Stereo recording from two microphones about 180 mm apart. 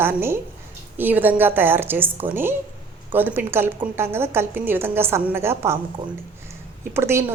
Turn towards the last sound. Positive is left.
turn(degrees=-15)  # may be behind; listen again after turning